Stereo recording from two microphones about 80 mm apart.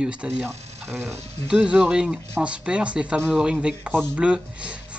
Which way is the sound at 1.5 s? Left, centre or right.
Centre.